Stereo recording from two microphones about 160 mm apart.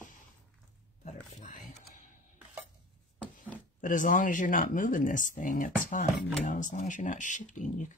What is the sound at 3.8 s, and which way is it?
Speech, 55° left (ahead or behind).